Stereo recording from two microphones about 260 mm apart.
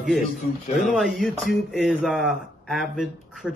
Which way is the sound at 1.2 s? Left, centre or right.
Centre.